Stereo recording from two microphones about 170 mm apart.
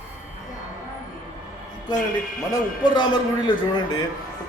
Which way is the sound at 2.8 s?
25° left (ahead or behind).